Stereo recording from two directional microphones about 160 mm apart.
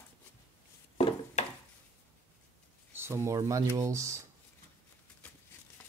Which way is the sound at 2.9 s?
15° right (ahead or behind).